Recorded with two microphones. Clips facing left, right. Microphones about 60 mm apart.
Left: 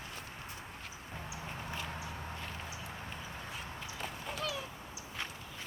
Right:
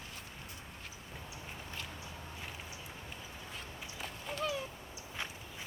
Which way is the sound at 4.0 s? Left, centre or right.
Centre.